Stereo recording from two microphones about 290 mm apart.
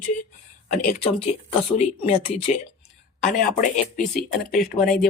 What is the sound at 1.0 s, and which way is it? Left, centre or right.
Speech, centre.